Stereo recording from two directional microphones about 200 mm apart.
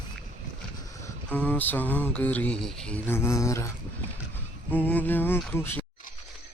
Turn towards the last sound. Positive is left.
turn(degrees=10)  # may be behind; listen again after turning